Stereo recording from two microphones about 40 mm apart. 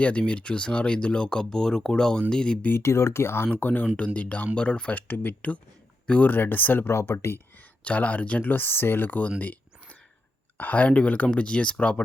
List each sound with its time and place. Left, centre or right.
0.0 s speech: left
2.6 s speech: left
3.5 s speech: left
4.9 s speech: left
6.3 s speech: left
6.8 s speech: left
7.9 s speech: left
9.0 s speech: left
10.6 s speech: left